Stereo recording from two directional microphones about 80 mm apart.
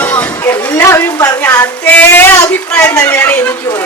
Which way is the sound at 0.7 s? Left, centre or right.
Left.